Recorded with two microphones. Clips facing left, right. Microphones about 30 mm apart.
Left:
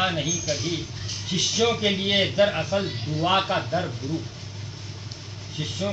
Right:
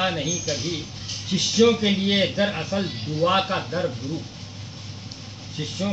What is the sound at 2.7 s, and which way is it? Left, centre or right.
Speech, left.